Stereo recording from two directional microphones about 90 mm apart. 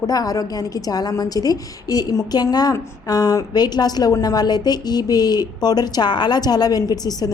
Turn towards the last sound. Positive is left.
turn(degrees=45)  # may be behind; listen again after turning